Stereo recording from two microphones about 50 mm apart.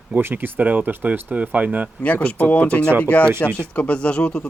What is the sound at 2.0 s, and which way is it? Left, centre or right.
Speech, left.